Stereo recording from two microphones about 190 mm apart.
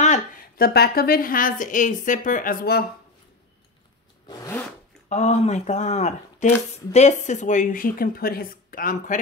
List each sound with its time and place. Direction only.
0.0 s a woman's voice: 45° left (ahead or behind)
4.3 s zipper: 15° left (ahead or behind)
5.1 s a woman's voice: 35° left (ahead or behind)